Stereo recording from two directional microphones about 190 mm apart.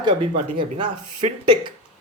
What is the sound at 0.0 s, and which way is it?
Speech, 25° right (ahead or behind).